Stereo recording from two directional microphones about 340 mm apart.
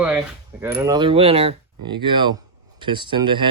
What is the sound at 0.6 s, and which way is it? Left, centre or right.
Speech, centre.